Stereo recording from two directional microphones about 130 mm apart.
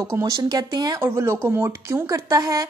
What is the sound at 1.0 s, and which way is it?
A woman's voice, 20° right (ahead or behind).